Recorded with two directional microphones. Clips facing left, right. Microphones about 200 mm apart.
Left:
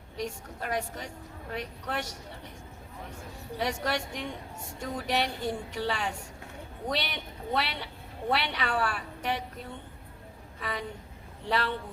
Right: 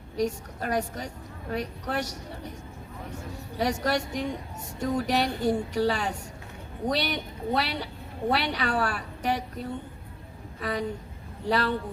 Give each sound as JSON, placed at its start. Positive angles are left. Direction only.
{"t": 0.2, "sound": "a woman's voice", "side_deg": -40}
{"t": 3.6, "sound": "a woman's voice", "side_deg": -40}